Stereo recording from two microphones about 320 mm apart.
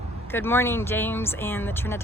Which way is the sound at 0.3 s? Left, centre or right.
Centre.